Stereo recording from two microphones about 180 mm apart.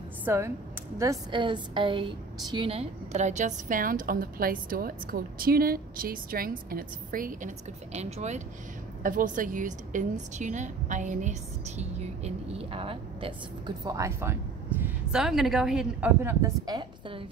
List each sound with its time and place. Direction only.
0.2 s a woman's voice: 15° right (ahead or behind); by 8.4 s 40° right (ahead or behind)
9.0 s a woman's voice: 50° right (ahead or behind); by 17.2 s 25° right (ahead or behind)